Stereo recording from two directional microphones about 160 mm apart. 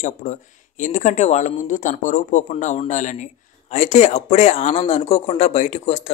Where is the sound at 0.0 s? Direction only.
50° left (ahead or behind).